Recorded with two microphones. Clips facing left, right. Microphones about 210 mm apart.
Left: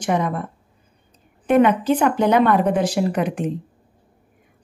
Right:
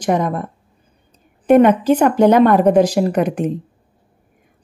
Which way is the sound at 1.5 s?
40° right (ahead or behind).